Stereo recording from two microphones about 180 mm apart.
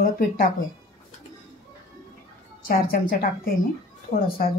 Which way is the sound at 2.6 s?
55° left (ahead or behind).